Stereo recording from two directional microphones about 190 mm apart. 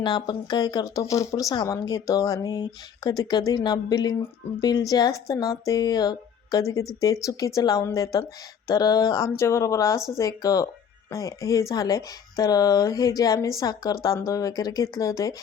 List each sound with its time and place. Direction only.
0.0 s a woman's voice: 25° left (ahead or behind)